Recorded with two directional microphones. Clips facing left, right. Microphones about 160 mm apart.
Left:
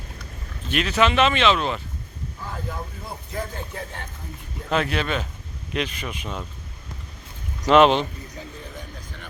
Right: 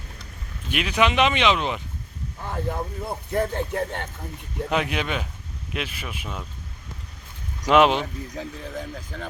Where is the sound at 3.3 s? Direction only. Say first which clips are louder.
Right 8 dB; 60° right (ahead or behind).